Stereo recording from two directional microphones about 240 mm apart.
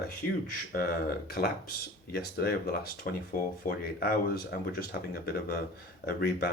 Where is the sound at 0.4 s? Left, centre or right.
Left.